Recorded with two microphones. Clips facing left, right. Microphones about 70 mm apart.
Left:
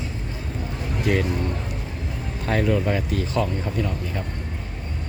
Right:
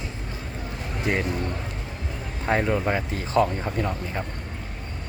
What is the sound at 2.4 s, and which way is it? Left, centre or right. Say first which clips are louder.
Speech: left 1 dB; right.